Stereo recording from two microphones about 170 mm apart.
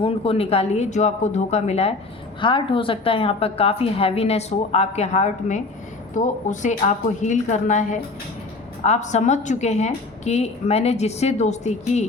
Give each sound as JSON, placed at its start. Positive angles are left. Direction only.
{"t": 0.0, "sound": "a woman's voice", "side_deg": 35}